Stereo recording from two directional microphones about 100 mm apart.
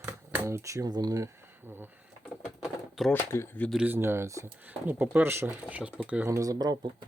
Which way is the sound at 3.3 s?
25° left (ahead or behind).